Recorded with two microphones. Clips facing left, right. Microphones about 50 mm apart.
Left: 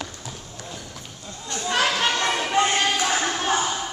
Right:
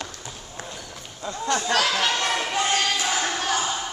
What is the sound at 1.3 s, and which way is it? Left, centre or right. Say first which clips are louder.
Speech: right 8 dB; right.